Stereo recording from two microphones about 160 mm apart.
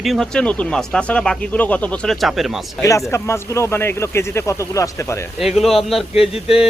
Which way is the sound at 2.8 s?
20° left (ahead or behind).